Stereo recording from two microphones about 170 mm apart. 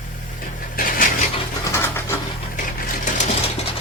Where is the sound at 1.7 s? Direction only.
15° left (ahead or behind).